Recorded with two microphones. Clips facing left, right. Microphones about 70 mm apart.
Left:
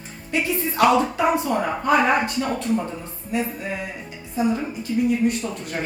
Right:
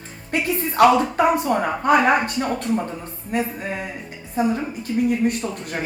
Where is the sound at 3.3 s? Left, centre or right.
Right.